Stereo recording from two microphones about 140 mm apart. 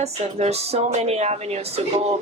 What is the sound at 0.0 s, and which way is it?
Speech, 50° right (ahead or behind).